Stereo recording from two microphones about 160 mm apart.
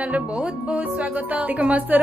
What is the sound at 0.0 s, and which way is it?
Music, 5° right (ahead or behind).